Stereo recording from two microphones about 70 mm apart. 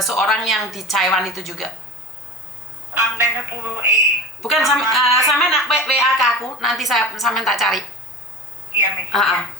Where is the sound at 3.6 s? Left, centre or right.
Right.